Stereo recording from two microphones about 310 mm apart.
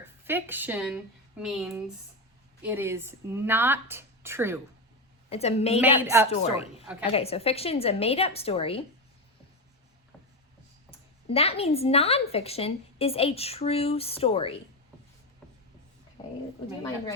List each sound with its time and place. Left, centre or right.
0.0 s speech: centre
5.3 s a woman's voice: centre
6.0 s speech: centre
6.3 s a woman's voice: centre
11.3 s a woman's voice: centre